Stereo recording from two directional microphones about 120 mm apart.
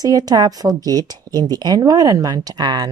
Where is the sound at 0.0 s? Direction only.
30° right (ahead or behind).